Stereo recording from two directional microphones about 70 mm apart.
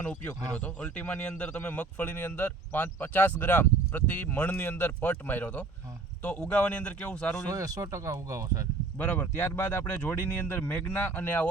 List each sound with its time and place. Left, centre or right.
0.0 s speech: centre
7.5 s speech: right
9.0 s speech: centre